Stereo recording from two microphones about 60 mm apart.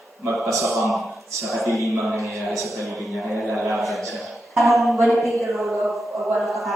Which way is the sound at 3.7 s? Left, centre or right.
Centre.